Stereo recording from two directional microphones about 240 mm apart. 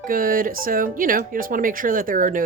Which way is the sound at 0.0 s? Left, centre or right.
Right.